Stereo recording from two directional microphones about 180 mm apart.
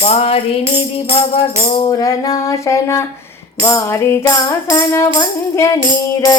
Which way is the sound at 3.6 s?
15° left (ahead or behind).